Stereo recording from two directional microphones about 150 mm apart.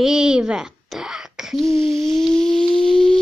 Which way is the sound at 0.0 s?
5° right (ahead or behind).